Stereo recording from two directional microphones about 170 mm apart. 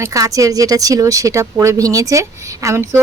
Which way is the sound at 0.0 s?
20° right (ahead or behind).